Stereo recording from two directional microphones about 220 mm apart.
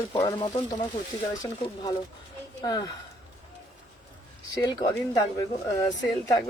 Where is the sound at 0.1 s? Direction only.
20° left (ahead or behind).